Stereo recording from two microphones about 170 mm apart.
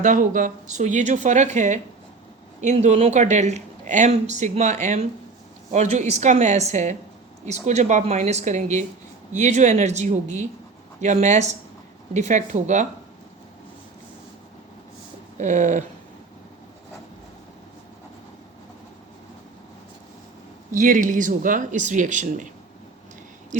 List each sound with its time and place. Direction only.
0.0 s speech: 50° right (ahead or behind)
15.4 s speech: 45° right (ahead or behind)
20.7 s speech: 50° right (ahead or behind)